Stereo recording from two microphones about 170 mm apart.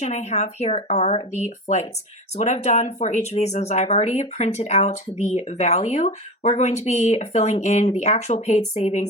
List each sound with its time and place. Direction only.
0.0 s speech: 40° left (ahead or behind)